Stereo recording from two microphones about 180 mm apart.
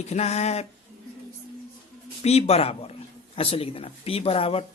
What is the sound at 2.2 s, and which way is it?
Speech, 35° left (ahead or behind).